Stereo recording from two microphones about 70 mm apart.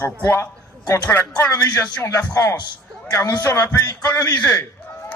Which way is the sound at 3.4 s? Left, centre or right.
Left.